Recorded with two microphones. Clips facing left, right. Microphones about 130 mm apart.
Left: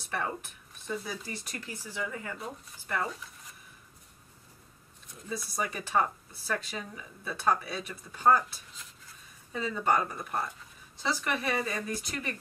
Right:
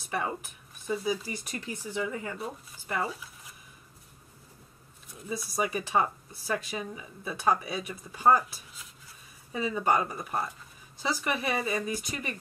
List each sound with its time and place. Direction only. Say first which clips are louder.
0.1 s speech: right 2 dB; 10° right (ahead or behind)
1.4 s speech: right 4 dB; 20° right (ahead or behind)
2.3 s speech: right 3 dB; 5° right (ahead or behind)
5.3 s speech: right 4 dB; 10° right (ahead or behind)